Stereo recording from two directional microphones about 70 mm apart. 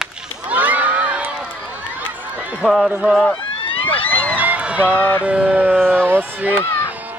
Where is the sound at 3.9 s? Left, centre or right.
Left.